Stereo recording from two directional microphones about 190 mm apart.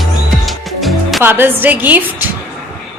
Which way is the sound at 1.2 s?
10° right (ahead or behind).